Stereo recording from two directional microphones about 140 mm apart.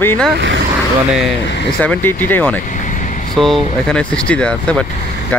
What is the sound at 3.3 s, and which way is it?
Speech, centre (ahead or behind).